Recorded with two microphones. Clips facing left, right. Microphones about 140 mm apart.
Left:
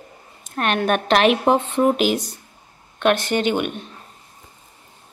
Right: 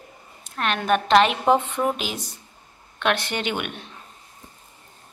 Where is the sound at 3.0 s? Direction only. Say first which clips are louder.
Left 6 dB; 40° left (ahead or behind).